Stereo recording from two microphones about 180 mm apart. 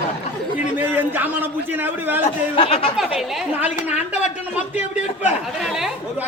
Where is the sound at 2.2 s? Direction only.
30° left (ahead or behind).